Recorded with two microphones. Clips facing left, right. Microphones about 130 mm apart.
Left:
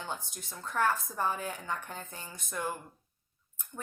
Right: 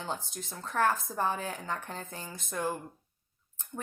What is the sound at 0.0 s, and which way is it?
Speech, 30° right (ahead or behind).